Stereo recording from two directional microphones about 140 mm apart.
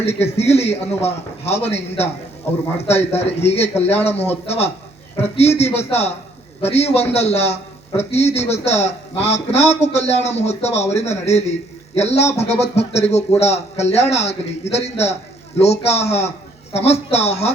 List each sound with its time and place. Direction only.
0.0 s speech: 50° left (ahead or behind)